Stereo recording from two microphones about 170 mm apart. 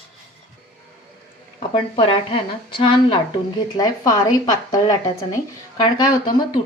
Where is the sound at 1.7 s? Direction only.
30° left (ahead or behind).